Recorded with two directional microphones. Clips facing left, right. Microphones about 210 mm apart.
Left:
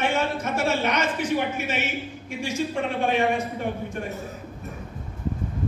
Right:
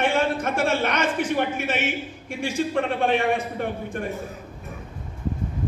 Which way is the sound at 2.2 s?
55° right (ahead or behind).